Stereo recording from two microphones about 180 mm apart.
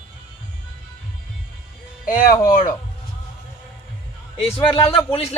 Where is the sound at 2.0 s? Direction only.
50° left (ahead or behind).